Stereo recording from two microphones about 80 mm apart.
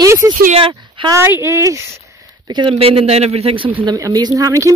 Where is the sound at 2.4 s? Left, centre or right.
Right.